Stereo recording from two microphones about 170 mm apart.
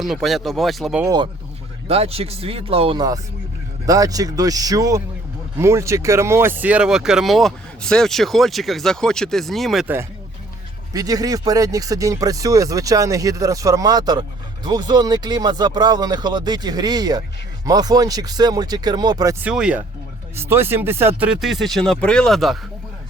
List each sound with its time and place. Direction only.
0.0 s speech: centre (ahead or behind)
1.0 s speech: 25° right (ahead or behind)
1.9 s speech: 35° right (ahead or behind); by 9.8 s centre (ahead or behind)
9.8 s speech: 15° right (ahead or behind)
19.5 s speech: 5° right (ahead or behind)